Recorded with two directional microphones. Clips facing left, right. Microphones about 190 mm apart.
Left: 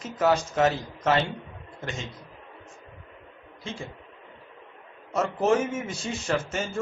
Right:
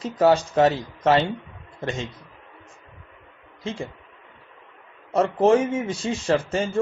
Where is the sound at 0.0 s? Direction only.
30° right (ahead or behind).